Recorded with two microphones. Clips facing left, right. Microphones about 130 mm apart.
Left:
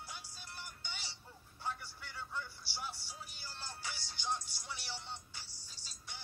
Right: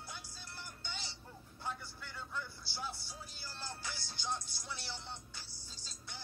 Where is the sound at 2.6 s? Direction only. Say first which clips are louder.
Right 1 dB; 15° left (ahead or behind).